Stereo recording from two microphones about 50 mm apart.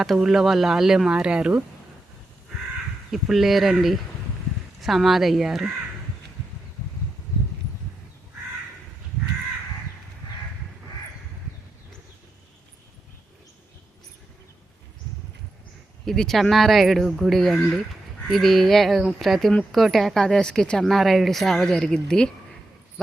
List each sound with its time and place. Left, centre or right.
0.0 s speech: centre
3.1 s speech: centre
16.0 s speech: centre
20.8 s speech: centre